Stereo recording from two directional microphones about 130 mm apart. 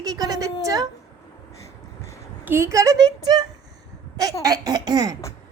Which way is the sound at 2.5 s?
20° right (ahead or behind).